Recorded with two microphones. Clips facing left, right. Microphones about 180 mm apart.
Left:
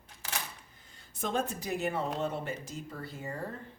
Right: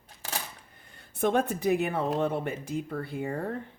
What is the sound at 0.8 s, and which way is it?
Speech, 60° right (ahead or behind).